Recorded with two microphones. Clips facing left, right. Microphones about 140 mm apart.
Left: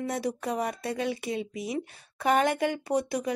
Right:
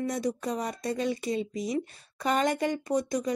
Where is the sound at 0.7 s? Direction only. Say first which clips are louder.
Right 1 dB; 5° left (ahead or behind).